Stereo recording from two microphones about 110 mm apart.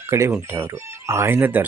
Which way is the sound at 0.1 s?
25° right (ahead or behind).